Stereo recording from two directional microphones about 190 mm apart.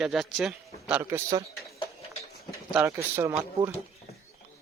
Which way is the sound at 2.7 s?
15° right (ahead or behind).